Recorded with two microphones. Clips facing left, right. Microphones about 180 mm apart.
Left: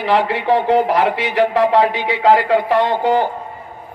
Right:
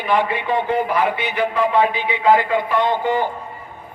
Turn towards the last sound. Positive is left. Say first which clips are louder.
# left 4 dB
turn(degrees=75)  # may be behind; listen again after turning